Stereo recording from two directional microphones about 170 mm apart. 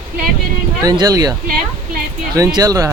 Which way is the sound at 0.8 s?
20° right (ahead or behind).